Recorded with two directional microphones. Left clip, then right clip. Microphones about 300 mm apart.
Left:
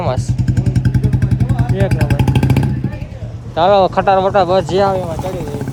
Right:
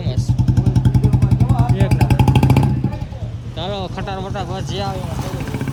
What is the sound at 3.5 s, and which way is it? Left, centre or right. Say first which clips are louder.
Speech: left 15 dB; centre.